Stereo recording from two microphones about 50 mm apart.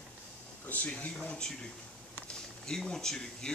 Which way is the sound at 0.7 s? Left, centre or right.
Left.